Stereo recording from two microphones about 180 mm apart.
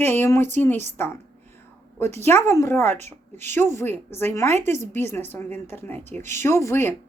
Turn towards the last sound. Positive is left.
turn(degrees=15)  # may be behind; listen again after turning